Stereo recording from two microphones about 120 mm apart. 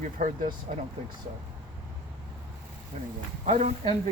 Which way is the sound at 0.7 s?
75° right (ahead or behind).